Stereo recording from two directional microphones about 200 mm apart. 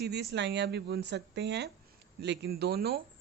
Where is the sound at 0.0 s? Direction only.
55° right (ahead or behind).